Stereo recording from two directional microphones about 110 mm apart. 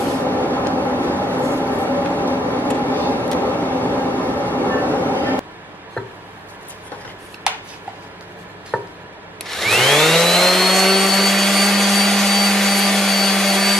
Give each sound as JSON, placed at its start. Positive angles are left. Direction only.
{"t": 0.3, "sound": "vehicle", "side_deg": 15}
{"t": 4.9, "sound": "train", "side_deg": 15}
{"t": 7.5, "sound": "a sound", "side_deg": -10}
{"t": 8.7, "sound": "chopping", "side_deg": 0}
{"t": 9.4, "sound": "vacuum cleaner", "side_deg": 0}